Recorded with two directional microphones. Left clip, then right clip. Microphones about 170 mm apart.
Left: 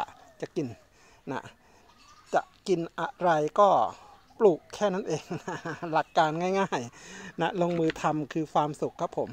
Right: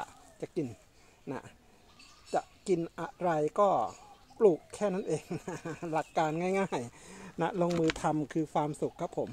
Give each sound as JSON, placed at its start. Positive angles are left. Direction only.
{"t": 0.0, "sound": "a sound", "side_deg": 20}
{"t": 1.2, "sound": "speech", "side_deg": 20}
{"t": 8.4, "sound": "speech", "side_deg": 10}